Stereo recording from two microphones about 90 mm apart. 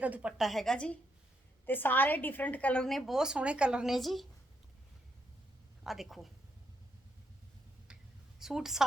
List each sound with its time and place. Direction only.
0.0 s speech: 15° right (ahead or behind); by 0.9 s 10° left (ahead or behind)
1.6 s a woman's voice: 20° left (ahead or behind)
2.8 s speech: centre (ahead or behind)
5.8 s speech: centre (ahead or behind)
7.9 s a sound: 10° right (ahead or behind)
8.4 s a woman's voice: 5° right (ahead or behind)